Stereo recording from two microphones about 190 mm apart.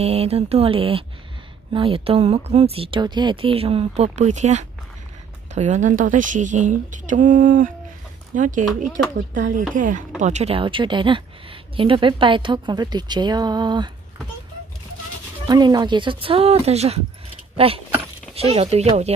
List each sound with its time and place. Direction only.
0.0 s a woman's voice: 30° right (ahead or behind)
15.4 s a woman's voice: 20° right (ahead or behind)